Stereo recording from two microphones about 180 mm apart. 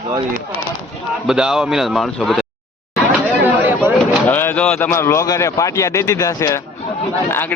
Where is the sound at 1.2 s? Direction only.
5° right (ahead or behind).